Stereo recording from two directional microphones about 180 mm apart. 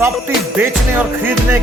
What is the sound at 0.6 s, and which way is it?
Speech, 10° right (ahead or behind).